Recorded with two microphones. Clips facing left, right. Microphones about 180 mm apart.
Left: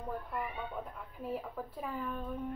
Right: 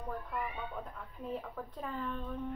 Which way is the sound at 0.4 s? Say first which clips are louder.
Left 1 dB; 15° left (ahead or behind).